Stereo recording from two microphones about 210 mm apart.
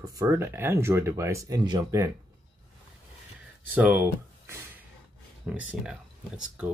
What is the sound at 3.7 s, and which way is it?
Speech, 10° right (ahead or behind).